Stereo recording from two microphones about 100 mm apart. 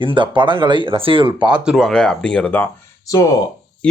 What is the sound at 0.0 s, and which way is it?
Speech, 55° right (ahead or behind).